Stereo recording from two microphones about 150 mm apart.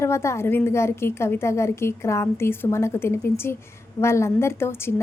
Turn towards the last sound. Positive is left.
turn(degrees=15)  # may be behind; listen again after turning